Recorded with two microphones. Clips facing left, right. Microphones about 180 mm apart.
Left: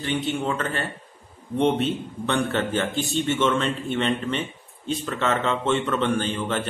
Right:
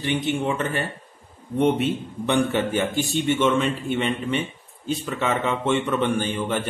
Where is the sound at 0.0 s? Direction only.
15° right (ahead or behind).